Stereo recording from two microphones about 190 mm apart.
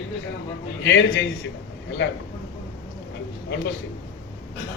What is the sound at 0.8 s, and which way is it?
Speech, 80° left.